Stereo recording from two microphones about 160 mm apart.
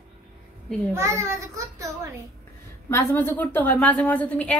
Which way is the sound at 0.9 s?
15° right (ahead or behind).